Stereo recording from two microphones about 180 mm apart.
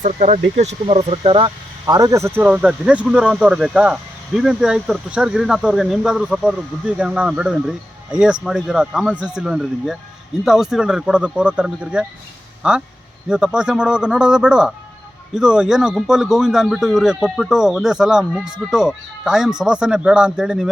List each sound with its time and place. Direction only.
0.0 s speech: 40° right (ahead or behind); by 20.7 s 5° right (ahead or behind)